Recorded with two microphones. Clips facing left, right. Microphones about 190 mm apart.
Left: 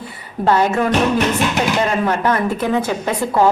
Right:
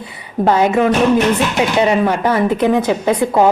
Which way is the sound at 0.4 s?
10° right (ahead or behind).